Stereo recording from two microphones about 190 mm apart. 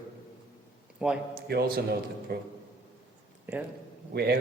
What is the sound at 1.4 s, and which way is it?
A man's voice, 55° right (ahead or behind).